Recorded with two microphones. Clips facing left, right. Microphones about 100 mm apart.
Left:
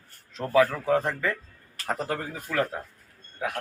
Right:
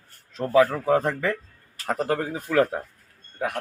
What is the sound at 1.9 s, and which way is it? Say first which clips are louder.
Speech: right 5 dB; 60° right (ahead or behind).